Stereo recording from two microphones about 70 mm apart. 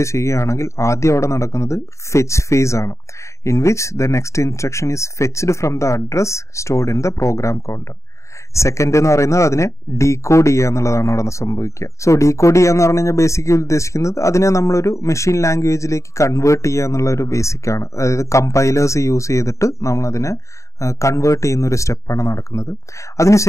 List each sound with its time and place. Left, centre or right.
0.0 s speech: left